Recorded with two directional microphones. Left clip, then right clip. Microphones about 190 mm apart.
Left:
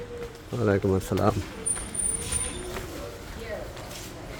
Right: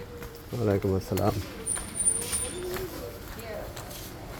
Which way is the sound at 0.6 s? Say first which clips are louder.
Left 3 dB; 15° left (ahead or behind).